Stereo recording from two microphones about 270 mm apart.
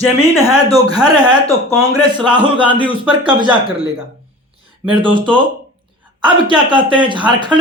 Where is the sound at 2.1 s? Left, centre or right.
Centre.